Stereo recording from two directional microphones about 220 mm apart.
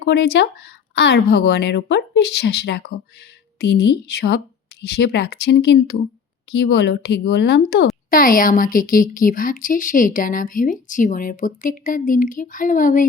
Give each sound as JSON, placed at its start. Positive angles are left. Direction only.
{"t": 0.0, "sound": "a woman's voice", "side_deg": 50}